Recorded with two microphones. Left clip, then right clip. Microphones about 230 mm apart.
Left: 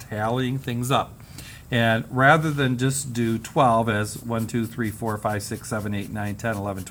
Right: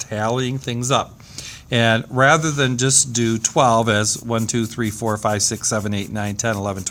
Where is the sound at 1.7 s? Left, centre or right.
Right.